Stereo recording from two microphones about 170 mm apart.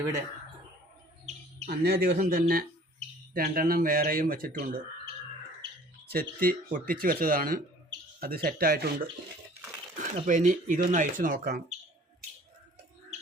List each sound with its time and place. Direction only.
1.2 s chirp: 40° right (ahead or behind)
1.8 s speech: 65° right (ahead or behind)
6.1 s speech: 60° right (ahead or behind)
10.0 s speech: 45° right (ahead or behind)